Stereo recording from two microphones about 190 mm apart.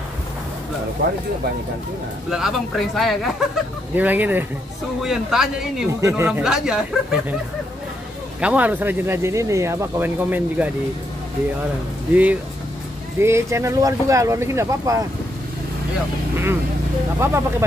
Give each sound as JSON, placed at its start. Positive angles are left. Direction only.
{"t": 2.2, "sound": "speech", "side_deg": 0}
{"t": 5.9, "sound": "speech", "side_deg": -15}
{"t": 8.4, "sound": "speech", "side_deg": -5}
{"t": 13.2, "sound": "speech", "side_deg": -15}
{"t": 17.2, "sound": "speech", "side_deg": -15}